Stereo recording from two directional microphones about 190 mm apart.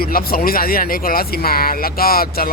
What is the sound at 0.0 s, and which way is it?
Speech, 50° left (ahead or behind).